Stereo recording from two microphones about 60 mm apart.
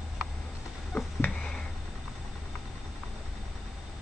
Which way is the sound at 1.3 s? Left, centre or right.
Centre.